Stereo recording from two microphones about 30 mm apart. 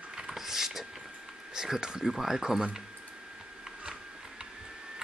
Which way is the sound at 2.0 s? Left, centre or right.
Centre.